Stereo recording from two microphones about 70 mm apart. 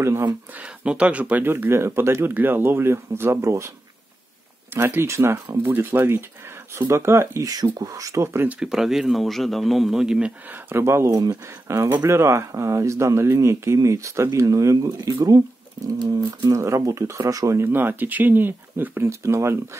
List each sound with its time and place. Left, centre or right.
0.6 s speech: centre
1.4 s speech: right
4.7 s speech: right
7.4 s speech: right
8.5 s speech: centre
10.5 s speech: right
11.1 s speech: right
11.6 s speech: right
17.6 s speech: right